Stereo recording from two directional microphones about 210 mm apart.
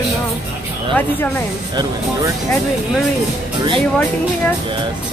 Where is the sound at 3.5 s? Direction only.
20° right (ahead or behind).